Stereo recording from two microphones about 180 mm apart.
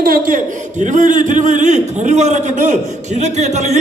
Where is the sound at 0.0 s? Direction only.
50° right (ahead or behind).